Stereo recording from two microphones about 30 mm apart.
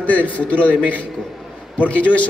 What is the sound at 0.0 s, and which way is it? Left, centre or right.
Speech, left.